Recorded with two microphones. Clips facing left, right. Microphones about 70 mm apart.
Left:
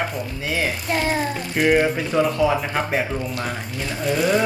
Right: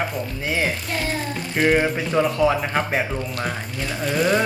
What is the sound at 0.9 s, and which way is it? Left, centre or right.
Speech, left.